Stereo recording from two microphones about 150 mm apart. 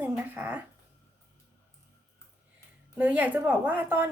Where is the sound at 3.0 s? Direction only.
10° right (ahead or behind).